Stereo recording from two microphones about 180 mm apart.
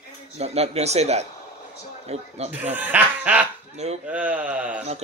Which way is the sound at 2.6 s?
10° right (ahead or behind).